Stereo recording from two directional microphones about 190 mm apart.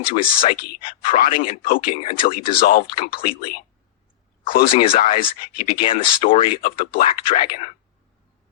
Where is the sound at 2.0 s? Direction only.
30° left (ahead or behind).